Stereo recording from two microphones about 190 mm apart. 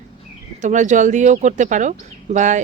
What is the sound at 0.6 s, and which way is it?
Speech, 40° right (ahead or behind).